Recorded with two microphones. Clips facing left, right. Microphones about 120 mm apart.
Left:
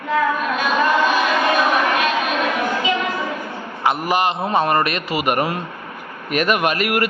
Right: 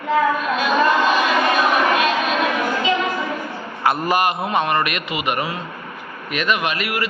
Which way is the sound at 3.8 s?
20° left (ahead or behind).